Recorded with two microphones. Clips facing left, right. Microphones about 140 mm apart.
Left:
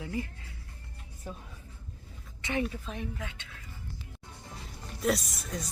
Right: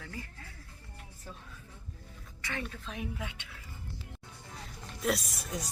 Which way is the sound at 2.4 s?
20° left (ahead or behind).